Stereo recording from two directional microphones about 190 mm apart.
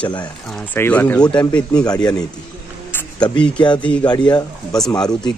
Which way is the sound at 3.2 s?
25° left (ahead or behind).